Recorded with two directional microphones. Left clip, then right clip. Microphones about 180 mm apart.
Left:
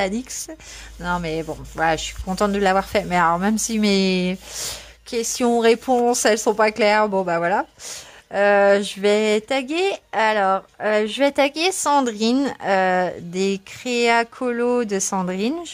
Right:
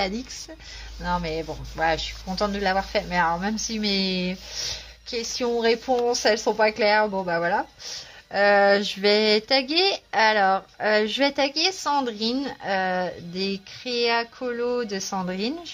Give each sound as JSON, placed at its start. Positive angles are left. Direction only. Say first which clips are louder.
{"t": 1.0, "sound": "speech", "louder": "left 3 dB", "side_deg": 60}
{"t": 8.3, "sound": "a sound", "louder": "left 3 dB", "side_deg": 25}
{"t": 11.3, "sound": "speech", "louder": "left 4 dB", "side_deg": 35}
{"t": 15.1, "sound": "speech", "louder": "left 5 dB", "side_deg": 30}